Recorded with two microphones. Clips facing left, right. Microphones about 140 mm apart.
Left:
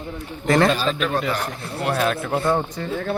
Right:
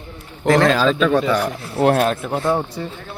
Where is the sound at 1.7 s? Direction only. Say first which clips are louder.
Right 9 dB; 65° right (ahead or behind).